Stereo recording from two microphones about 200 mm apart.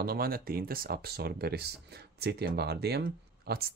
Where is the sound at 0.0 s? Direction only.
50° right (ahead or behind).